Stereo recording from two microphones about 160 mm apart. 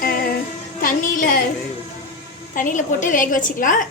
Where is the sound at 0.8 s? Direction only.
60° left (ahead or behind).